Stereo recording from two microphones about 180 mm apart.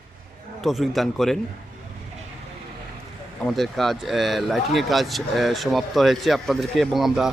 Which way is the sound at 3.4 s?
Centre (ahead or behind).